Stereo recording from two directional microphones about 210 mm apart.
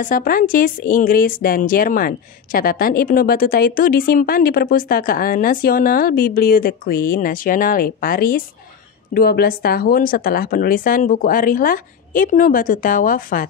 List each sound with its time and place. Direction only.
0.0 s speech: 40° left (ahead or behind)